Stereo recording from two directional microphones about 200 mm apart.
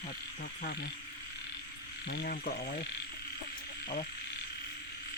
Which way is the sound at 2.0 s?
50° left (ahead or behind).